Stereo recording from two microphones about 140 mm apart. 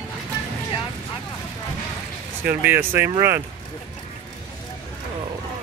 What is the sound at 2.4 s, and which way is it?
Speech, 15° right (ahead or behind).